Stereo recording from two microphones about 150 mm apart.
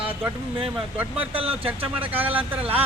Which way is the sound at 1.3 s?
40° right (ahead or behind).